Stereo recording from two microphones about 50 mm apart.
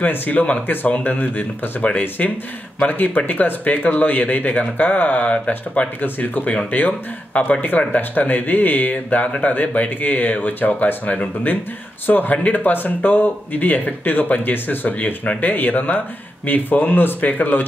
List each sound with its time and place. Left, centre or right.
0.1 s speech: left
6.0 s speech: left
6.9 s speech: left